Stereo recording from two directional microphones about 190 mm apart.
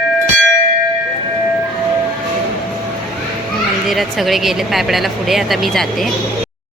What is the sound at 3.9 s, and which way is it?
Speech, centre (ahead or behind).